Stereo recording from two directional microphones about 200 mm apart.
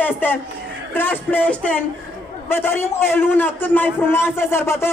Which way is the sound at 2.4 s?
10° left (ahead or behind).